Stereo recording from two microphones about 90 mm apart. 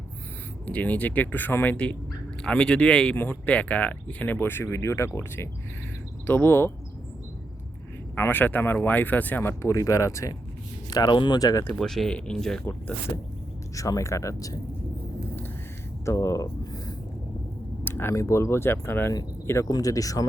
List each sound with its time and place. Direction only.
0.6 s speech: 15° left (ahead or behind)
8.1 s speech: 25° left (ahead or behind)
10.8 s speech: 50° left (ahead or behind)
11.3 s speech: 40° left (ahead or behind)
11.7 s speech: centre (ahead or behind)
13.7 s speech: 40° left (ahead or behind)
16.0 s speech: 35° left (ahead or behind)
17.8 s speech: 25° left (ahead or behind)